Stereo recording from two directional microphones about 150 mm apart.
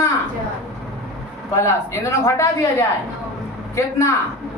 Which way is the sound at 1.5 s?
20° left (ahead or behind).